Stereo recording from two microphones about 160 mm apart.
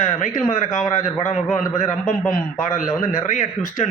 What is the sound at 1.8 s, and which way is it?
Speech, 50° left (ahead or behind).